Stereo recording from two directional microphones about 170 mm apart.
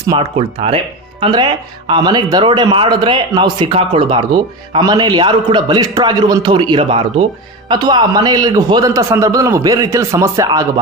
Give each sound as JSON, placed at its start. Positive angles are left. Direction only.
{"t": 0.4, "sound": "speech", "side_deg": -35}